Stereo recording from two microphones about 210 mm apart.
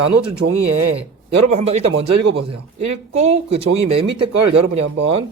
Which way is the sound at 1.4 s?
30° right (ahead or behind).